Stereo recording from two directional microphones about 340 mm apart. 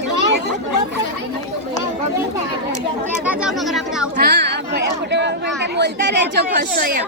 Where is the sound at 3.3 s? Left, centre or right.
Centre.